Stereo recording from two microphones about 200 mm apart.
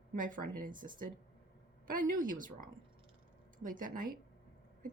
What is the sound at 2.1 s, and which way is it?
A woman's voice, 45° right (ahead or behind).